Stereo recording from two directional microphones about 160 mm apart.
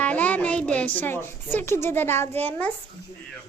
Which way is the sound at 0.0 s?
10° left (ahead or behind).